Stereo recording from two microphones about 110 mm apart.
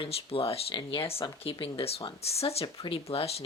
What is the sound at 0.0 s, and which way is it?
Speech, 60° left (ahead or behind).